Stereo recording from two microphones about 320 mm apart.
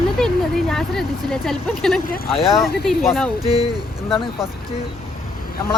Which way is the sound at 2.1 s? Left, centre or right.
Centre.